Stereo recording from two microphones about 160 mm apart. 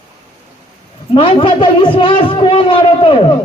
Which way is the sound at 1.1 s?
35° left (ahead or behind).